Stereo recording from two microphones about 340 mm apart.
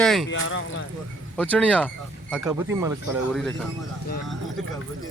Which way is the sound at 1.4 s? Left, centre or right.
Centre.